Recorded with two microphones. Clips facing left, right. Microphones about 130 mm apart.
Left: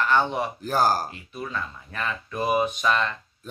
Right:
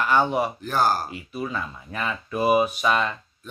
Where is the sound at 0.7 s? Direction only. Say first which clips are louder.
Left 2 dB; 40° left (ahead or behind).